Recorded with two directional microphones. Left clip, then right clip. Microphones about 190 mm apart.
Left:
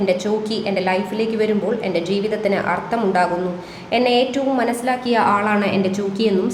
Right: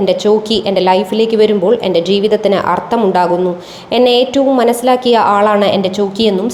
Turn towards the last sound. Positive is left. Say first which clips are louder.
# right 7 dB
turn(degrees=-35)  # may be behind; listen again after turning